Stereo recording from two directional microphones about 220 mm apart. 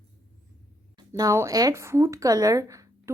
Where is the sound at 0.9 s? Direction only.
15° right (ahead or behind).